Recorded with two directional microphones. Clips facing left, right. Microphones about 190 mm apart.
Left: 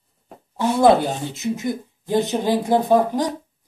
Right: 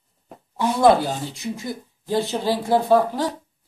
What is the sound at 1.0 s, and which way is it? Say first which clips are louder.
Speech: left 3 dB; 20° left (ahead or behind).